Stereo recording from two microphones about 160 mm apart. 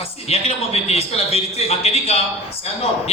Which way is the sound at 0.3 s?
40° left (ahead or behind).